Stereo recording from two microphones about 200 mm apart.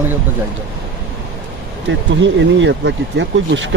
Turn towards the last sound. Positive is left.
turn(degrees=-65)  # may be behind; listen again after turning